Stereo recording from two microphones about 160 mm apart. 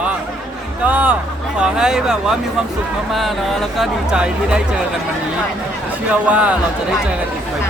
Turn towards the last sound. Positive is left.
turn(degrees=-10)  # may be behind; listen again after turning